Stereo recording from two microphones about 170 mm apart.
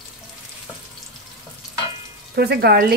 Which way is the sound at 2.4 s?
65° right (ahead or behind).